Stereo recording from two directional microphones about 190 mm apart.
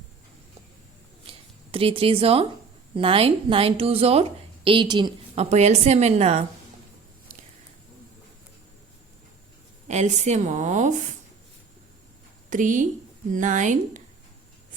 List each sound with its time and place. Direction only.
1.3 s a woman's voice: 30° right (ahead or behind)
9.8 s a woman's voice: 35° right (ahead or behind)
12.5 s a woman's voice: 40° right (ahead or behind)